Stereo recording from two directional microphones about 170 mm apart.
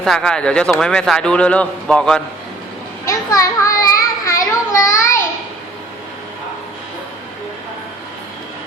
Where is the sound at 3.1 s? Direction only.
20° left (ahead or behind).